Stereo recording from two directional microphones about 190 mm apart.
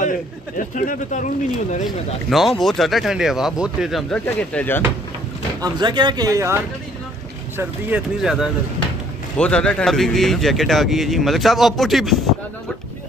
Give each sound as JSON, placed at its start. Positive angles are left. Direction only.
{"t": 0.7, "sound": "speech", "side_deg": 45}
{"t": 1.9, "sound": "speech", "side_deg": 0}
{"t": 5.6, "sound": "speech", "side_deg": -25}